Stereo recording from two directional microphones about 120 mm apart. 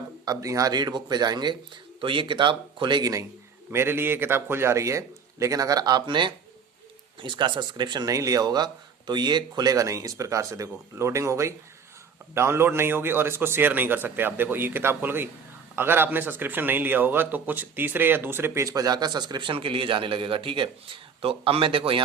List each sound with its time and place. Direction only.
0.3 s speech: 30° right (ahead or behind)
3.7 s a man's voice: 20° right (ahead or behind); by 22.0 s 50° right (ahead or behind)